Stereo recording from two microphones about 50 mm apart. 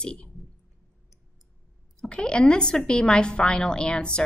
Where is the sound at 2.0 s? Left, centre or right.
Centre.